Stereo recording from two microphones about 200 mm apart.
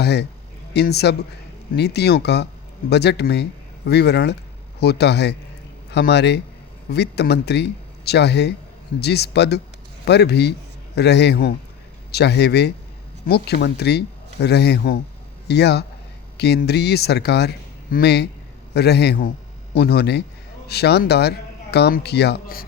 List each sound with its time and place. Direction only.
0.0 s speech: 55° left (ahead or behind)